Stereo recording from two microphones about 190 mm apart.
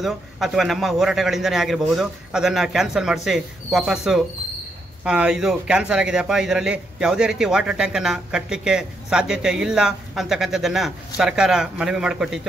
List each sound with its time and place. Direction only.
0.0 s a man's voice: centre (ahead or behind)